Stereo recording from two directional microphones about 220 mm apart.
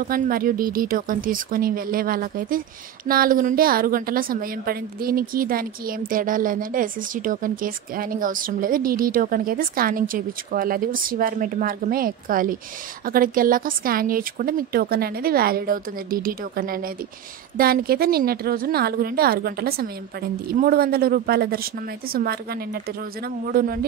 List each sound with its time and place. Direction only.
0.0 s a woman's voice: 40° right (ahead or behind)